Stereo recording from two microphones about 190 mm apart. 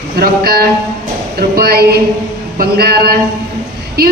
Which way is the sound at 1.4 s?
55° right (ahead or behind).